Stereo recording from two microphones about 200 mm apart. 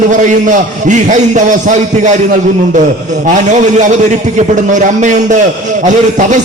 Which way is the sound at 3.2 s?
40° right (ahead or behind).